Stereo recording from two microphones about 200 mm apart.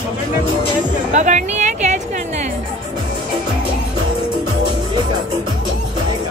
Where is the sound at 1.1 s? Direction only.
35° right (ahead or behind).